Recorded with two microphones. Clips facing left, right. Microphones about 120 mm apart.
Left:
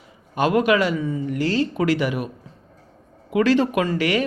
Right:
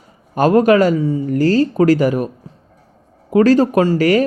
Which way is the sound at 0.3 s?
40° right (ahead or behind).